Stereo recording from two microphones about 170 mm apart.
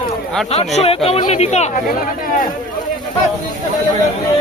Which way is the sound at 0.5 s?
40° left (ahead or behind).